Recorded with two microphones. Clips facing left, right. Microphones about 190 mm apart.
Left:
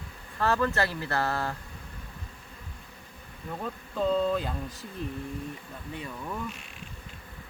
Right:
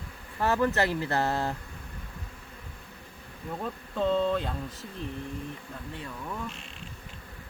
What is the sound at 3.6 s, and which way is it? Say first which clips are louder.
Speech: even; centre (ahead or behind).